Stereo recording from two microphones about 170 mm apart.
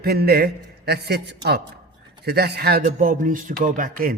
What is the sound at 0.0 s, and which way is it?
A man's voice, 65° right (ahead or behind).